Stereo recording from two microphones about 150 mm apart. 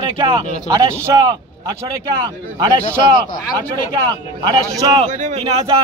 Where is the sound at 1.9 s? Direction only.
30° right (ahead or behind).